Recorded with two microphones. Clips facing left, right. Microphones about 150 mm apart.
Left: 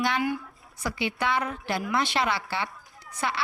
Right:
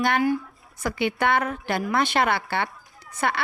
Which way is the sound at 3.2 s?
55° right (ahead or behind).